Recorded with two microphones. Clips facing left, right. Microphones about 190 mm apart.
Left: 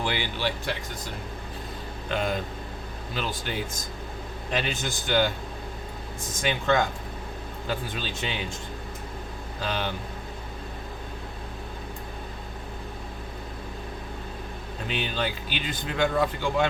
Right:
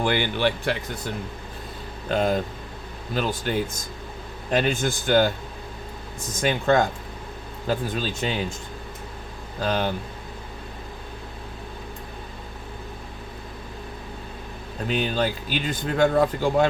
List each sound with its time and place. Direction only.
0.0 s speech: 55° right (ahead or behind)
2.0 s speech: 40° right (ahead or behind)
6.4 s speech: 45° right (ahead or behind)
9.6 s speech: 45° right (ahead or behind)
14.8 s speech: 45° right (ahead or behind)